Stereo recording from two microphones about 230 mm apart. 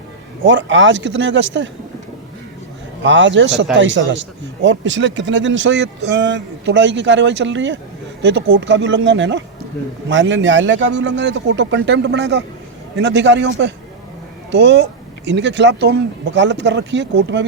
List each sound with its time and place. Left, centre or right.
0.4 s a man's voice: right
3.0 s a man's voice: right